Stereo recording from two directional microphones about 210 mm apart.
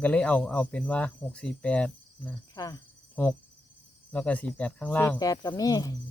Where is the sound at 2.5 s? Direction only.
20° left (ahead or behind).